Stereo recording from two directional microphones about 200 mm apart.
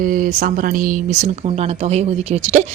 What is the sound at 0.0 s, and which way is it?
A woman's voice, 45° right (ahead or behind).